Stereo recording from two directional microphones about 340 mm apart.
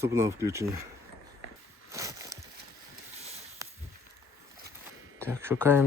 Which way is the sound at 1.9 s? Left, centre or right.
Centre.